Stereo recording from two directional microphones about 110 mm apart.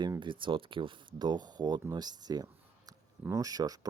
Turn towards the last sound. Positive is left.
turn(degrees=-35)  # may be behind; listen again after turning